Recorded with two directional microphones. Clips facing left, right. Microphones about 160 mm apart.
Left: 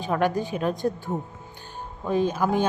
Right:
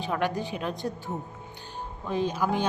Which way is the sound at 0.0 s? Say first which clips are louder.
Left 4 dB; 45° left (ahead or behind).